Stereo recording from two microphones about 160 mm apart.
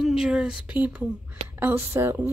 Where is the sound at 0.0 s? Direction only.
5° right (ahead or behind).